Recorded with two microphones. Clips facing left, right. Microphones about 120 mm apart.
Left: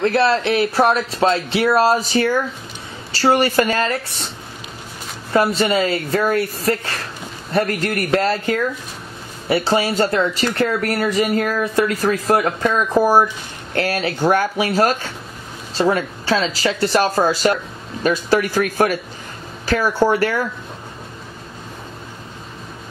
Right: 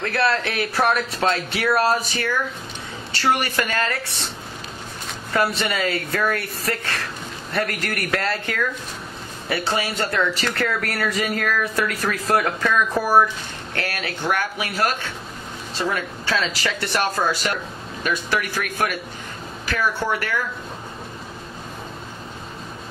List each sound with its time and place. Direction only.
0.0 s speech: 30° left (ahead or behind)
5.6 s speech: 30° left (ahead or behind)